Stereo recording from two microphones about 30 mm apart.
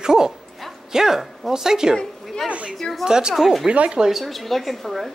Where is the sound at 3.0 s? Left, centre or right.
Right.